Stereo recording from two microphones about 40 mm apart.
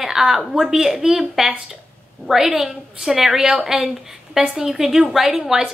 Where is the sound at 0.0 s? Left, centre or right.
Centre.